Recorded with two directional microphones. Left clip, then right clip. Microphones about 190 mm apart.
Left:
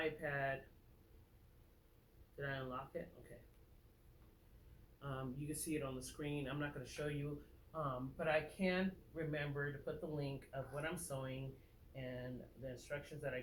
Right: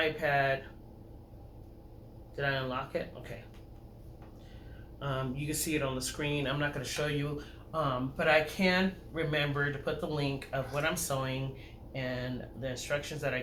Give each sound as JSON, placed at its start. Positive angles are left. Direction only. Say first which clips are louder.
{"t": 0.0, "sound": "speech", "louder": "right 12 dB", "side_deg": -15}
{"t": 2.3, "sound": "speech", "louder": "right 13 dB", "side_deg": -15}
{"t": 4.9, "sound": "speech", "louder": "right 12 dB", "side_deg": -15}